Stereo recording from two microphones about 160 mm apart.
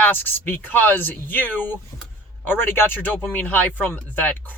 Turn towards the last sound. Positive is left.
turn(degrees=10)  # may be behind; listen again after turning